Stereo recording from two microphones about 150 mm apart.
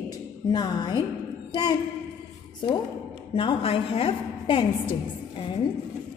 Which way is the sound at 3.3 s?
40° left (ahead or behind).